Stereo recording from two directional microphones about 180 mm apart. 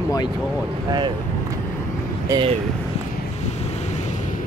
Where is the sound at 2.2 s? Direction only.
20° right (ahead or behind).